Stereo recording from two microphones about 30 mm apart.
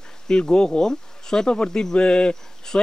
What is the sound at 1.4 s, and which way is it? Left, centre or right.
Speech, left.